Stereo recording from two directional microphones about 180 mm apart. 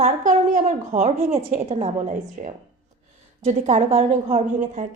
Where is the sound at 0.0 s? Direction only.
45° right (ahead or behind).